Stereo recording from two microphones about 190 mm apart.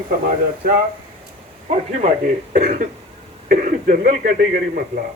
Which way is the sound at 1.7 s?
40° right (ahead or behind).